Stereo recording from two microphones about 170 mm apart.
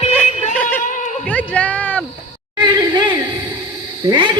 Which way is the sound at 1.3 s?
10° left (ahead or behind).